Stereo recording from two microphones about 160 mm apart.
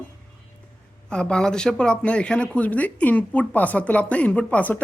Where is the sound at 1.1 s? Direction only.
5° left (ahead or behind).